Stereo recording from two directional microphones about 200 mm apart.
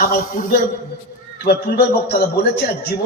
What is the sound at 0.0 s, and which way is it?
A man's voice, 45° left (ahead or behind).